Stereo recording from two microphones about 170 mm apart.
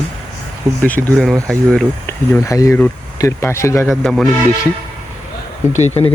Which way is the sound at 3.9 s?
Centre (ahead or behind).